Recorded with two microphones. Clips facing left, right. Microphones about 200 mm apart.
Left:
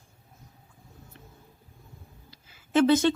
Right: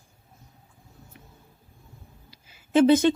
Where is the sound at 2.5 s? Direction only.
20° right (ahead or behind).